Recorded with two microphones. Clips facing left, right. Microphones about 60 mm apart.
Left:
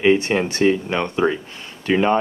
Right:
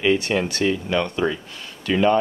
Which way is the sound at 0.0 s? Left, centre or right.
Left.